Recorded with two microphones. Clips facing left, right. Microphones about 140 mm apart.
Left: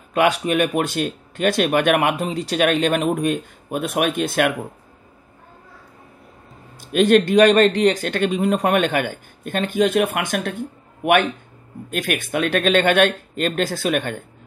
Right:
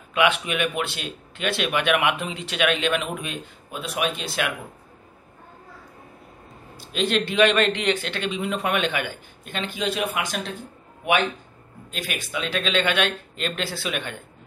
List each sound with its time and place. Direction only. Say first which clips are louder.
0.1 s speech: left 4 dB; 40° left (ahead or behind)
6.8 s speech: left 9 dB; 50° left (ahead or behind)
11.9 s speech: left 8 dB; 55° left (ahead or behind)